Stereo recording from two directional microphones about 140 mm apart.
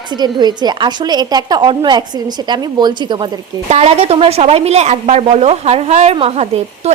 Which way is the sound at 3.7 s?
50° right (ahead or behind).